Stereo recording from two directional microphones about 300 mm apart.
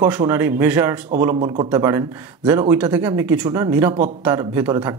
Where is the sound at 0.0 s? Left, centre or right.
Centre.